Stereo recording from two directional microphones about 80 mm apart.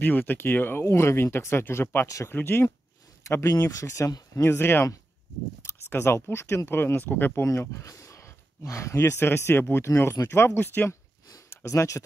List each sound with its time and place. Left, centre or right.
0.0 s speech: left
2.0 s speech: left
2.3 s speech: left
3.3 s speech: left
7.4 s speech: left
11.5 s speech: left